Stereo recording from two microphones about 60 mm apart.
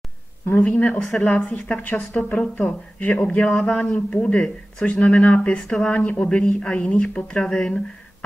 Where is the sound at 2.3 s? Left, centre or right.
Centre.